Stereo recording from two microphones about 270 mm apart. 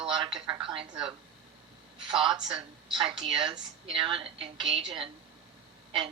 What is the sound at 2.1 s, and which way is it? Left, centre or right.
A woman's voice, centre.